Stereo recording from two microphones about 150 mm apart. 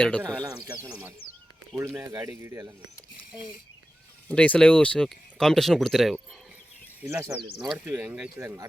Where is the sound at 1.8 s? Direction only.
20° right (ahead or behind).